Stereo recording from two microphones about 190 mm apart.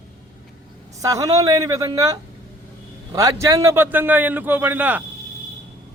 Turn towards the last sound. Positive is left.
turn(degrees=-10)  # may be behind; listen again after turning